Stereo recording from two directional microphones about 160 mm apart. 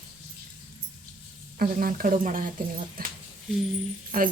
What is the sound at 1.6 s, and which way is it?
Speech, 65° right (ahead or behind).